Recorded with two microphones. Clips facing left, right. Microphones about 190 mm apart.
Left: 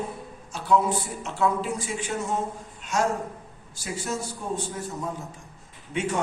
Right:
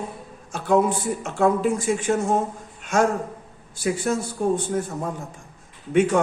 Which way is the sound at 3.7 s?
55° right (ahead or behind).